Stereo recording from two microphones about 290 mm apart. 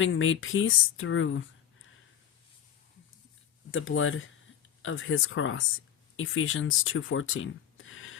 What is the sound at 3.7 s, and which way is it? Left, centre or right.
Speech, left.